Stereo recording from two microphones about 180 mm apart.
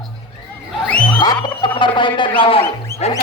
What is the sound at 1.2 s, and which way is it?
Music, 25° left (ahead or behind).